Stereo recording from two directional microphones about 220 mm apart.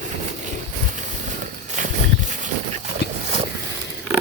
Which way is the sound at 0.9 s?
35° right (ahead or behind).